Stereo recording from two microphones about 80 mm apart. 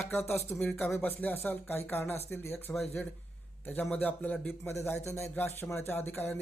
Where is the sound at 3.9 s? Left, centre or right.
Centre.